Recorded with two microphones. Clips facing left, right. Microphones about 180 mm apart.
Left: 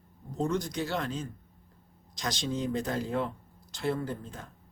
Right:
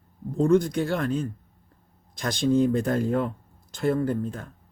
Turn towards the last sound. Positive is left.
turn(degrees=-55)  # may be behind; listen again after turning